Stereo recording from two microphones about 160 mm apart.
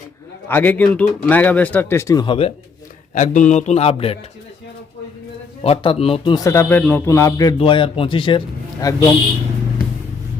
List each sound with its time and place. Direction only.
0.4 s speech: 10° left (ahead or behind)
2.2 s speech: 35° left (ahead or behind)
3.2 s speech: 50° left (ahead or behind)
5.6 s a man's voice: 35° left (ahead or behind)
7.6 s speech: 30° left (ahead or behind)
8.8 s a man's voice: 20° left (ahead or behind)